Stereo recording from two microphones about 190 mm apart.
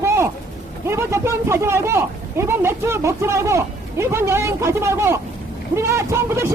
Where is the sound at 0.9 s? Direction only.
15° right (ahead or behind).